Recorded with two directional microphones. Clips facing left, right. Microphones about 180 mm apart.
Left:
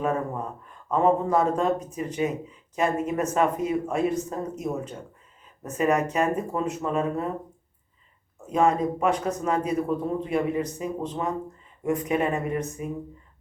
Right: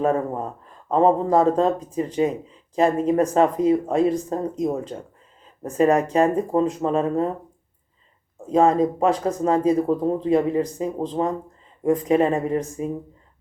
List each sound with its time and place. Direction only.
0.0 s speech: 30° right (ahead or behind)
8.4 s speech: 30° right (ahead or behind)